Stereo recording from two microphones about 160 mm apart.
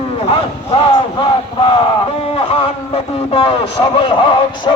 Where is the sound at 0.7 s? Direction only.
35° left (ahead or behind).